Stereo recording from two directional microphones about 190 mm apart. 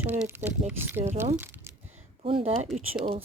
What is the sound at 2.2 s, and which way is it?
Speech, 30° right (ahead or behind).